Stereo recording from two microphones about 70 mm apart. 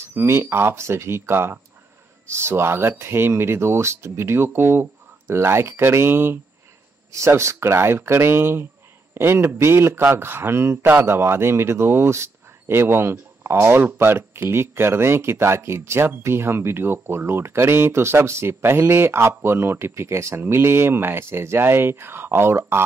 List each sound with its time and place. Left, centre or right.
0.0 s speech: right
10.8 s speech: right